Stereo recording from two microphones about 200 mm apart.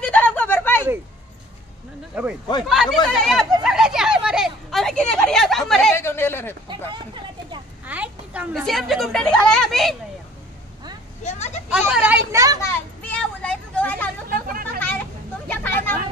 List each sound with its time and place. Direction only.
0.0 s a sound: 10° left (ahead or behind)
2.1 s speech: 5° right (ahead or behind)
3.6 s a sound: 5° right (ahead or behind)
5.9 s speech: 10° left (ahead or behind)
6.7 s vehicle: 25° right (ahead or behind)
7.8 s a woman's voice: 5° right (ahead or behind)
11.2 s vehicle: 35° left (ahead or behind)
11.7 s speech: 5° right (ahead or behind)
12.3 s speech: 15° right (ahead or behind)
12.5 s a sound: 10° left (ahead or behind)
14.3 s chatter: 45° right (ahead or behind)
15.4 s vehicle: 10° left (ahead or behind)